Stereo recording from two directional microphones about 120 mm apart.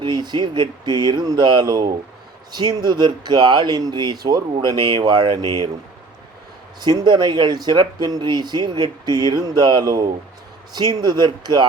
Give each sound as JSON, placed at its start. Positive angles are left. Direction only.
{"t": 0.0, "sound": "speech", "side_deg": -35}
{"t": 6.7, "sound": "speech", "side_deg": -35}